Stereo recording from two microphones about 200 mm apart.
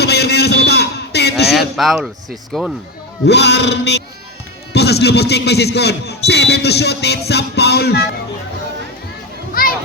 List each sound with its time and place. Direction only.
0.0 s a sound: 55° left (ahead or behind)
1.5 s a man's voice: centre (ahead or behind)
3.2 s speech: 60° left (ahead or behind)